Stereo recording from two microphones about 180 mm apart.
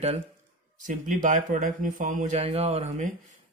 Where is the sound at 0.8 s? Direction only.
45° right (ahead or behind).